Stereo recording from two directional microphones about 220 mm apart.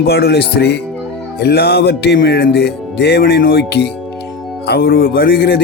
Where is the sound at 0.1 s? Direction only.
45° left (ahead or behind).